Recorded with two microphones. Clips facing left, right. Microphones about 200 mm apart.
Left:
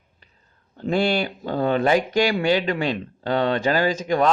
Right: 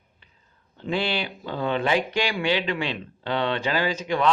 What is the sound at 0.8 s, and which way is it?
Speech, 45° left (ahead or behind).